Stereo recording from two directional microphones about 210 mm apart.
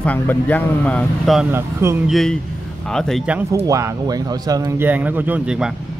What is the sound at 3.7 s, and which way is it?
Speech, 15° right (ahead or behind).